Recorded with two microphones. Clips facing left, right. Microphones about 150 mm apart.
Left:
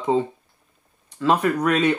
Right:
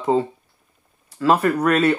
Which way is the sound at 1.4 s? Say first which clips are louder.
Right 2 dB; 5° right (ahead or behind).